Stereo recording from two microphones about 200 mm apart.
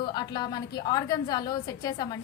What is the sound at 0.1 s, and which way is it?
A woman's voice, 20° left (ahead or behind).